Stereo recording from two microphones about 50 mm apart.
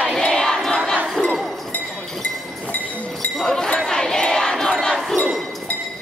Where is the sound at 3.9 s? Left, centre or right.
Centre.